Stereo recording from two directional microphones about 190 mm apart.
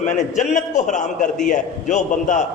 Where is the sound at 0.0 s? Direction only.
40° left (ahead or behind).